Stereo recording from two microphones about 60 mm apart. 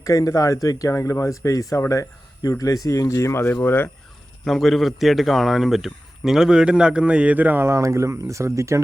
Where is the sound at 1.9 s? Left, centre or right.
Left.